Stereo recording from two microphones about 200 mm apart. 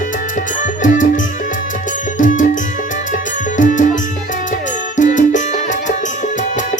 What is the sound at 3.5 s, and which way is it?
Music, 40° left (ahead or behind).